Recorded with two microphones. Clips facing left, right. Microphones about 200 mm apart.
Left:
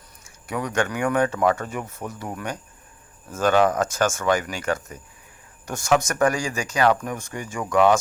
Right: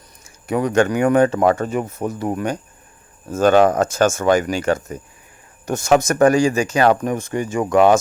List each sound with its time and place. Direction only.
0.3 s speech: 25° right (ahead or behind)